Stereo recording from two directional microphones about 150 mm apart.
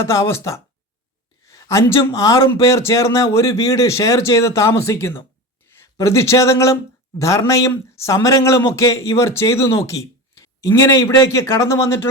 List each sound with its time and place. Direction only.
0.0 s speech: 20° left (ahead or behind)